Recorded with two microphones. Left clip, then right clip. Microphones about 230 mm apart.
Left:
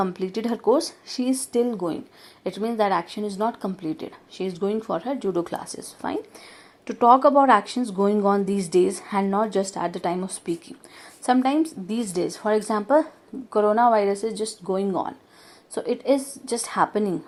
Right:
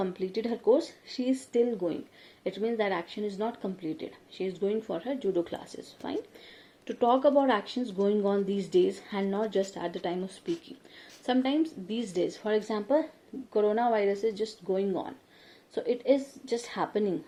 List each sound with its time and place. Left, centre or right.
0.0 s speech: left